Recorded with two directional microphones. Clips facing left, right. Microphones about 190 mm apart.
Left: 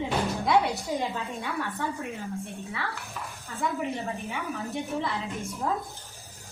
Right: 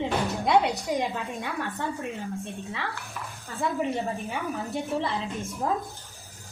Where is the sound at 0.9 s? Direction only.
15° right (ahead or behind).